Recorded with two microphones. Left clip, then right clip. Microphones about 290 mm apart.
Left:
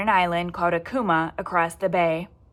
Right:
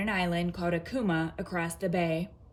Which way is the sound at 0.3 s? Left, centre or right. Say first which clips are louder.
Left 8 dB; centre.